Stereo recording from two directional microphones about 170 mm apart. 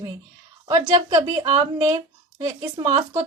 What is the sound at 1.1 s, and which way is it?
Speech, 20° right (ahead or behind).